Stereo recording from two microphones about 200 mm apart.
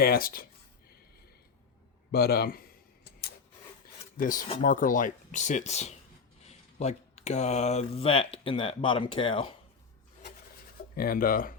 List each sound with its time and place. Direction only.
0.0 s speech: 45° left (ahead or behind)
2.1 s speech: 55° left (ahead or behind)
4.2 s speech: 40° left (ahead or behind); by 9.6 s 25° left (ahead or behind)
10.9 s speech: 50° left (ahead or behind)